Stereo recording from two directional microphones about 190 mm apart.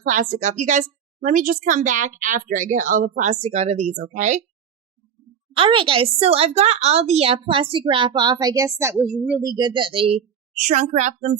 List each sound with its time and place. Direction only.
0.0 s a woman's voice: 40° right (ahead or behind)
5.5 s speech: 30° right (ahead or behind); by 9.4 s 5° right (ahead or behind)
9.4 s a woman's voice: 20° right (ahead or behind); by 11.3 s 35° right (ahead or behind)